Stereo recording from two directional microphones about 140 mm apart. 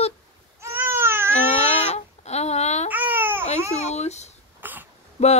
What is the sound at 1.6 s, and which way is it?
Babbling, 50° left (ahead or behind).